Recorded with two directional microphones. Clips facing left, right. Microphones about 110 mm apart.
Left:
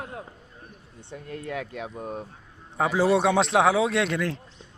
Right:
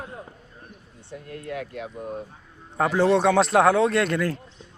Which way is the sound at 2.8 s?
5° left (ahead or behind).